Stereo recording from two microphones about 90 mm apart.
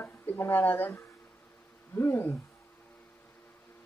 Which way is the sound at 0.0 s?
25° left (ahead or behind).